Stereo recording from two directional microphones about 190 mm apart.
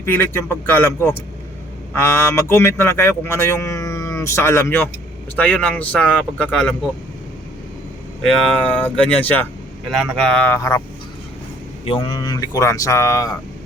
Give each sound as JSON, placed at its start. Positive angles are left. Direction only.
{"t": 0.0, "sound": "speech", "side_deg": 10}
{"t": 8.8, "sound": "speech", "side_deg": 5}
{"t": 11.9, "sound": "speech", "side_deg": 20}